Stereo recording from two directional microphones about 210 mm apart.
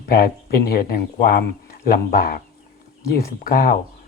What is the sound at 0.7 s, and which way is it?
Speech, 45° left (ahead or behind).